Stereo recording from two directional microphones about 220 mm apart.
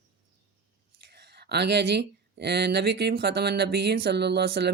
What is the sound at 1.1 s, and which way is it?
Speech, 50° right (ahead or behind).